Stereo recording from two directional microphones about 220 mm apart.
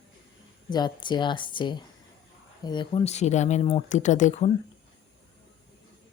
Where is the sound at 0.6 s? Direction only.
20° left (ahead or behind).